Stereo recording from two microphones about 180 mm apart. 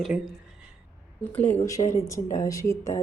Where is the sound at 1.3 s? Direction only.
10° left (ahead or behind).